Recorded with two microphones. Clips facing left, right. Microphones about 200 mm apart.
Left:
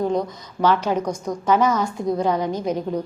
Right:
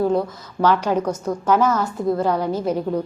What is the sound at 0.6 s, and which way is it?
A woman's voice, 10° right (ahead or behind).